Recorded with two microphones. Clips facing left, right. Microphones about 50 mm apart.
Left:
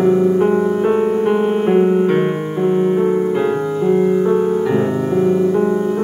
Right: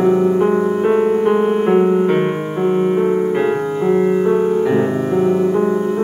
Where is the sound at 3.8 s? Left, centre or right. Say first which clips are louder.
Even; right.